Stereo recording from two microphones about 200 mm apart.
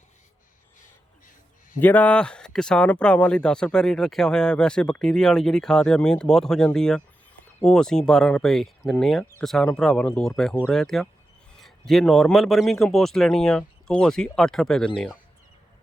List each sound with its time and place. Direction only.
1.8 s speech: 10° left (ahead or behind)